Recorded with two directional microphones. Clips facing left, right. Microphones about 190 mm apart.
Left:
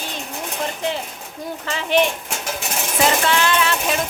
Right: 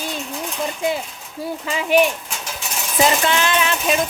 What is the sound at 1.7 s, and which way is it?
Speech, 10° right (ahead or behind).